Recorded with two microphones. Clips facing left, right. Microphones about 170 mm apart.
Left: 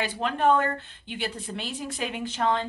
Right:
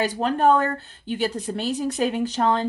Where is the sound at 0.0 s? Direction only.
40° right (ahead or behind).